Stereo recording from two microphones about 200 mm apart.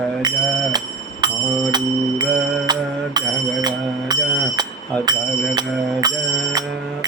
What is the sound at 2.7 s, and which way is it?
Speech, 20° right (ahead or behind).